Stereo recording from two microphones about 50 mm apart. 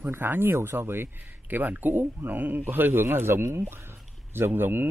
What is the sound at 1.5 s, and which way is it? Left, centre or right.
Speech, right.